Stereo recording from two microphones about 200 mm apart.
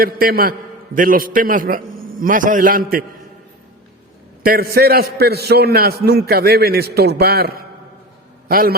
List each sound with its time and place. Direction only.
0.0 s a man's voice: 50° right (ahead or behind)
4.4 s a man's voice: 50° right (ahead or behind)